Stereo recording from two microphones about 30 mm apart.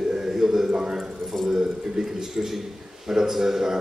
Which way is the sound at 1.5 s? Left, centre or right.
Centre.